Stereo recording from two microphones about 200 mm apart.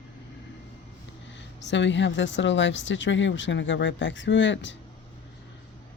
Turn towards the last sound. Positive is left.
turn(degrees=65)  # may be behind; listen again after turning